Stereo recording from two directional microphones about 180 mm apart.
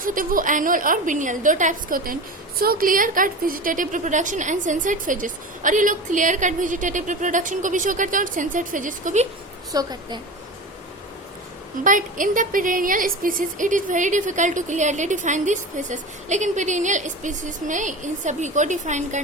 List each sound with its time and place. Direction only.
0.0 s a woman's voice: 50° right (ahead or behind)
9.7 s a woman's voice: 20° right (ahead or behind)
11.8 s a woman's voice: 45° right (ahead or behind)